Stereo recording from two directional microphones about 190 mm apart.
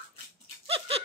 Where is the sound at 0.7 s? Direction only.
30° right (ahead or behind).